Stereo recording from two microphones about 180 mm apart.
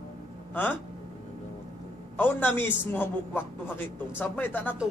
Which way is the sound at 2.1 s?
10° left (ahead or behind).